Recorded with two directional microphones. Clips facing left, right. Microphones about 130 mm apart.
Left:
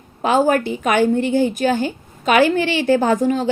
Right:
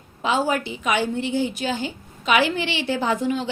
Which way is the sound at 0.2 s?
50° left (ahead or behind).